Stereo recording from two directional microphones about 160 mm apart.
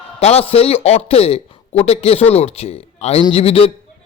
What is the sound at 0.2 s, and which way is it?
A man's voice, 40° left (ahead or behind).